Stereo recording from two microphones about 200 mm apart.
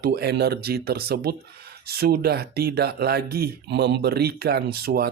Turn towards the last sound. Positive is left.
turn(degrees=-50)  # may be behind; listen again after turning